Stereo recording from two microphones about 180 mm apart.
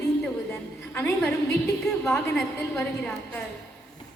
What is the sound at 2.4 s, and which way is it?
A woman's voice, 5° left (ahead or behind).